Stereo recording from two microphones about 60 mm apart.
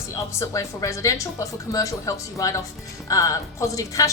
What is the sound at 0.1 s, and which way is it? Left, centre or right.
A woman's voice, left.